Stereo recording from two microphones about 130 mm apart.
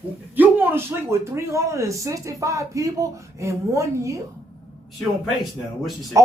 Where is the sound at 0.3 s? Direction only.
15° right (ahead or behind).